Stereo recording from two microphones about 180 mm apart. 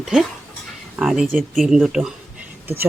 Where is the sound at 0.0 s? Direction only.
Centre (ahead or behind).